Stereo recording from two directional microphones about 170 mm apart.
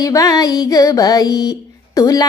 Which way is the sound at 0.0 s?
20° left (ahead or behind).